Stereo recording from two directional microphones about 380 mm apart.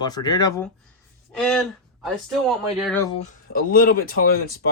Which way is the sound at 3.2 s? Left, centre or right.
Left.